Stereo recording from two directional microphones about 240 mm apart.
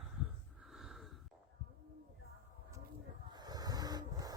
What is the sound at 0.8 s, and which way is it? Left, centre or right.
Wheeze, centre.